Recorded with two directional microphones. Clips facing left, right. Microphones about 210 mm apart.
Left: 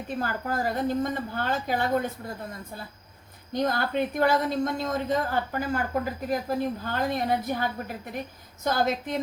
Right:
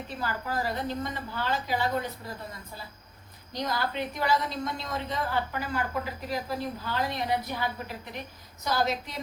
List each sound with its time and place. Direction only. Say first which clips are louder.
0.2 s a woman's voice: left 2 dB; 50° left (ahead or behind)
3.5 s a woman's voice: left 5 dB; 50° left (ahead or behind)